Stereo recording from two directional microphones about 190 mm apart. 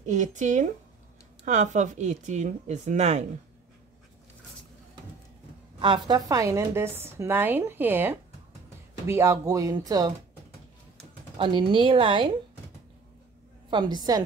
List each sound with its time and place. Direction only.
0.0 s speech: 40° right (ahead or behind)
5.8 s speech: 25° right (ahead or behind)
11.3 s speech: 25° right (ahead or behind)
13.7 s speech: 25° right (ahead or behind)